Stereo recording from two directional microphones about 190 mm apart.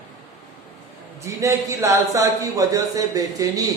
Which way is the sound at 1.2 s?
15° right (ahead or behind).